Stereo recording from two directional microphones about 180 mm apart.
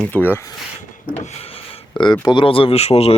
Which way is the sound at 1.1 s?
35° left (ahead or behind).